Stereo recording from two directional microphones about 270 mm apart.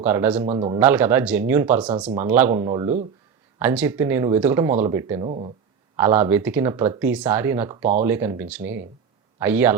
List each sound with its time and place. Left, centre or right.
0.0 s speech: centre
0.4 s speech: centre
0.8 s speech: centre